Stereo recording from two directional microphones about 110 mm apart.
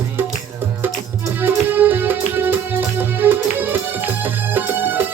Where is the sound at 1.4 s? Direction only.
20° right (ahead or behind).